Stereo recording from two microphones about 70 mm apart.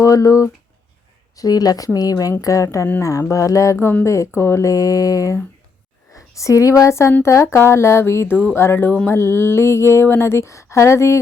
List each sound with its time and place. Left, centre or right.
0.0 s speech: left
1.4 s speech: left
2.4 s speech: left
7.1 s a sound: left